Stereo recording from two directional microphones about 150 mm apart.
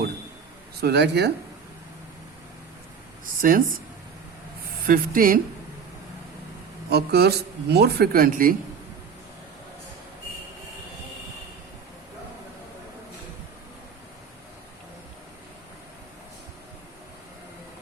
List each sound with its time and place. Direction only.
0.8 s speech: 90° right
3.2 s speech: 70° right (ahead or behind)
4.9 s speech: 70° right (ahead or behind)
6.9 s speech: 90° right; by 8.5 s 70° right (ahead or behind)